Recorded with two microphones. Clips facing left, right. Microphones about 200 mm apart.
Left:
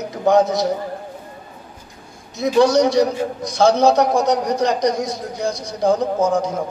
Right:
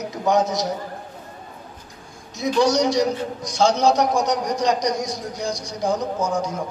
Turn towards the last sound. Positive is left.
turn(degrees=55)  # may be behind; listen again after turning